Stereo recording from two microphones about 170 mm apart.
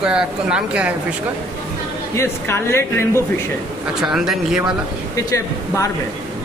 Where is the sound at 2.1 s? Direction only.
15° left (ahead or behind).